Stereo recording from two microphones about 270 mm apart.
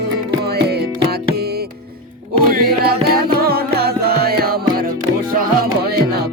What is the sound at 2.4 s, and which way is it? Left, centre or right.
Music, right.